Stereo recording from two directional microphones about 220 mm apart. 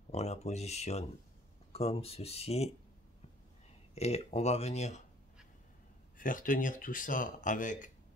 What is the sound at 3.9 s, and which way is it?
Speech, 30° left (ahead or behind).